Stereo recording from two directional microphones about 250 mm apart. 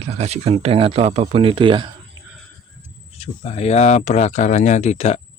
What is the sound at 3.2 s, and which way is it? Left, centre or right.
Speech, left.